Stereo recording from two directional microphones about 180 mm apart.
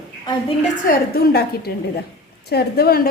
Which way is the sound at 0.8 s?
55° left (ahead or behind).